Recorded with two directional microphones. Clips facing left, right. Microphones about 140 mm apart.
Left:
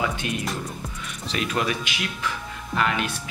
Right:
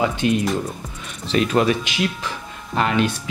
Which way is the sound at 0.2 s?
25° right (ahead or behind).